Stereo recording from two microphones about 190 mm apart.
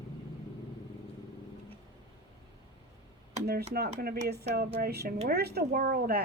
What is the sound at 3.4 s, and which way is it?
A woman's voice, 55° right (ahead or behind).